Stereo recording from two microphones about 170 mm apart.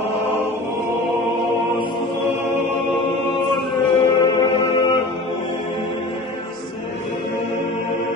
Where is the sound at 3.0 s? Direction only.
30° left (ahead or behind).